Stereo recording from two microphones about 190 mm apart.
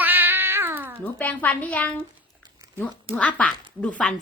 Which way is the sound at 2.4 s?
20° right (ahead or behind).